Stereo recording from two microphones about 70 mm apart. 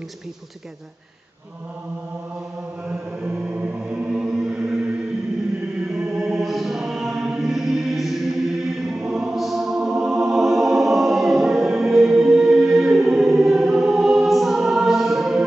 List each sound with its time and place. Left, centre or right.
3.3 s music: right
5.9 s chant: centre
8.9 s music: centre